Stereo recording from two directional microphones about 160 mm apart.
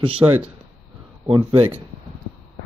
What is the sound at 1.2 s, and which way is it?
Speech, 35° right (ahead or behind).